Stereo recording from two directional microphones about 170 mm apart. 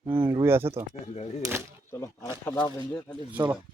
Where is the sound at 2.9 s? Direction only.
5° left (ahead or behind).